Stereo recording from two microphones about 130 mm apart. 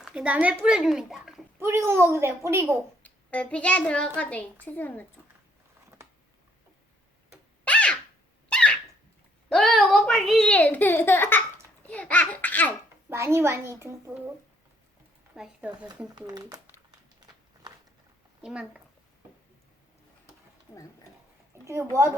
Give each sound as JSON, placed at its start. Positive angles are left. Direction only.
{"t": 0.0, "sound": "speech", "side_deg": -5}
{"t": 1.5, "sound": "a child's voice", "side_deg": -20}
{"t": 3.0, "sound": "a child's voice", "side_deg": 10}
{"t": 7.6, "sound": "a sound", "side_deg": 10}
{"t": 8.4, "sound": "squeak", "side_deg": 5}
{"t": 9.5, "sound": "a sound", "side_deg": 5}
{"t": 11.9, "sound": "babbling", "side_deg": 10}
{"t": 13.1, "sound": "a child's voice", "side_deg": -20}
{"t": 15.3, "sound": "speech", "side_deg": -5}
{"t": 16.1, "sound": "speech", "side_deg": -30}
{"t": 16.9, "sound": "walk", "side_deg": -30}
{"t": 18.4, "sound": "speech", "side_deg": -5}
{"t": 21.7, "sound": "a child's voice", "side_deg": -20}